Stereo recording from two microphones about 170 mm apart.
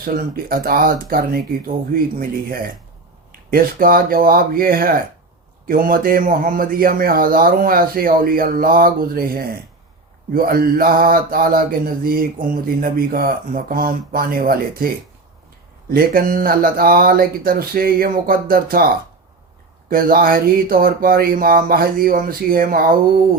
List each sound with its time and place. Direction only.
0.0 s mantra: 55° right (ahead or behind)
3.5 s mantra: 55° right (ahead or behind)
15.9 s mantra: 60° right (ahead or behind)
19.9 s mantra: 55° right (ahead or behind)